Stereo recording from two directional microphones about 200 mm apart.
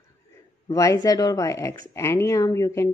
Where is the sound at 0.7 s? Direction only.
15° left (ahead or behind).